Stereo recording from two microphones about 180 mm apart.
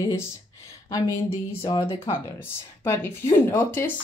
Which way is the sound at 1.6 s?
25° left (ahead or behind).